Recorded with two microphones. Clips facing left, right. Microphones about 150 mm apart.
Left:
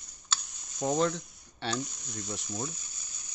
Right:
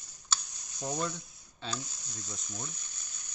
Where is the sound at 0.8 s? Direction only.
90° left; by 2.7 s 70° left (ahead or behind).